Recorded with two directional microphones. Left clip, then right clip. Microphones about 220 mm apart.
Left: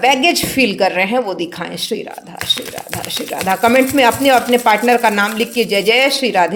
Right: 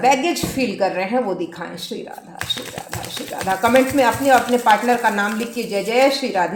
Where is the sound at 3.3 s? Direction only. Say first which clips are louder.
Left 3 dB; 45° left (ahead or behind).